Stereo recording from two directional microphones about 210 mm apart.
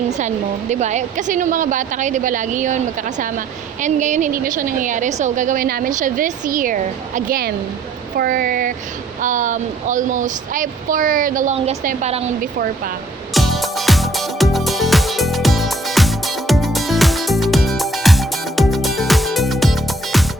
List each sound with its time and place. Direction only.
0.1 s speech: 35° right (ahead or behind)
13.3 s music: centre (ahead or behind)